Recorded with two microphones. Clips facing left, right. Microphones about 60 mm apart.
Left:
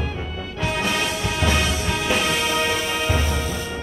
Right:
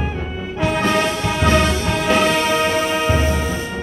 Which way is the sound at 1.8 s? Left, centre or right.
Centre.